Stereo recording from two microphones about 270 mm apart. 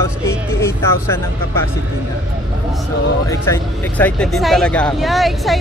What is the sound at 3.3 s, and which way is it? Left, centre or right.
Speech, centre.